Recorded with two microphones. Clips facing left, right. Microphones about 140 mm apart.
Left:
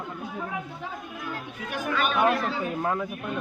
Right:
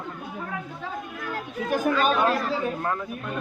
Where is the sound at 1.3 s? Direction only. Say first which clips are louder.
Right 11 dB; 35° right (ahead or behind).